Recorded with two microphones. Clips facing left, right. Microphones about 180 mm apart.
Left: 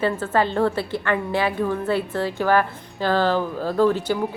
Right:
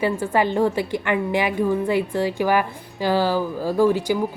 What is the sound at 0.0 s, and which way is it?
A woman's voice, 15° right (ahead or behind).